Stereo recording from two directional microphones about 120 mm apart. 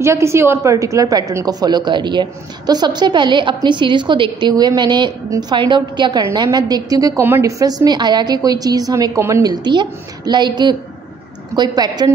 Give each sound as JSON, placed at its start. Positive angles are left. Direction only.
{"t": 0.0, "sound": "a woman's voice", "side_deg": -25}